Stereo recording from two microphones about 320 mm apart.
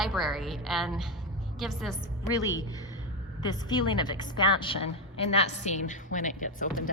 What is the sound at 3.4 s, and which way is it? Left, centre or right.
A woman's voice, centre.